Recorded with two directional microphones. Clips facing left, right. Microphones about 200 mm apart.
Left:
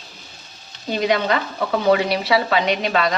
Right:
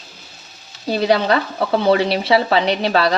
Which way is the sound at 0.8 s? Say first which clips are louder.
Right 3 dB; 35° right (ahead or behind).